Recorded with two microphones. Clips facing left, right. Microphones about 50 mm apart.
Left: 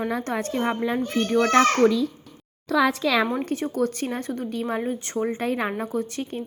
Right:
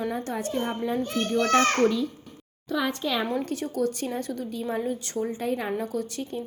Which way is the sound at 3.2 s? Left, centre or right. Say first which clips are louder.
Left 2 dB; left.